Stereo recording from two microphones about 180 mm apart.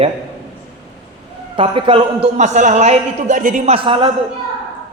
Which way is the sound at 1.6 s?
30° right (ahead or behind).